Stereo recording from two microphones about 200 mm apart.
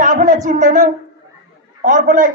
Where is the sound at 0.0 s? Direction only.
40° right (ahead or behind).